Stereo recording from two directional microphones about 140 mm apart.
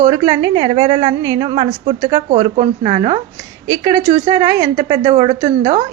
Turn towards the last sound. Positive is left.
turn(degrees=-30)  # may be behind; listen again after turning